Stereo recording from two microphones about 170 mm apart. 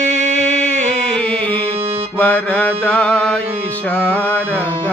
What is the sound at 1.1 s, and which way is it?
Music, 5° left (ahead or behind).